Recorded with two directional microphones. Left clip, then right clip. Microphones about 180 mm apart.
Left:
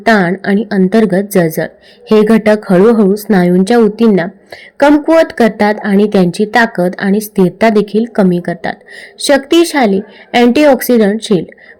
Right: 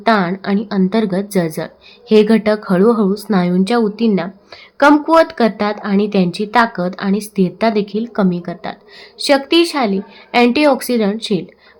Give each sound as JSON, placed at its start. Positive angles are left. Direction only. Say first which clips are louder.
{"t": 0.0, "sound": "a woman's voice", "louder": "left 4 dB", "side_deg": 20}